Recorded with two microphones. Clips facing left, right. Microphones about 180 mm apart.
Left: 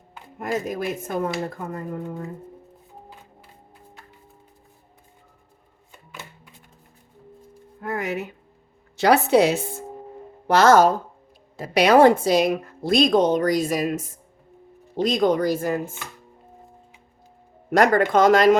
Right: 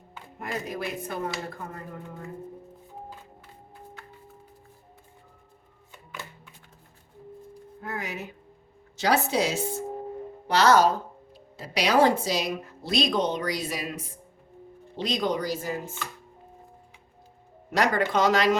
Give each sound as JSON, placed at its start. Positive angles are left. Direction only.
{"t": 0.3, "sound": "a woman's voice", "side_deg": 45}
{"t": 7.8, "sound": "speech", "side_deg": 60}
{"t": 10.4, "sound": "a woman's voice", "side_deg": 50}
{"t": 17.7, "sound": "a woman's voice", "side_deg": 50}